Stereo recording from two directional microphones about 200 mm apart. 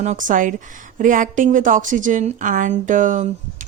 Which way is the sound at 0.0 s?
40° right (ahead or behind).